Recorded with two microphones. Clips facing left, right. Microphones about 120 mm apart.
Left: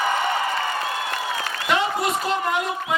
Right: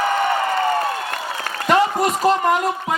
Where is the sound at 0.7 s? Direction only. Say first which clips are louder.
Right 5 dB; 45° right (ahead or behind).